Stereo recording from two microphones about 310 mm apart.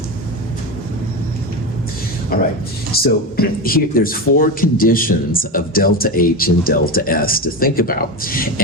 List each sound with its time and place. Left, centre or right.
3.0 s speech: left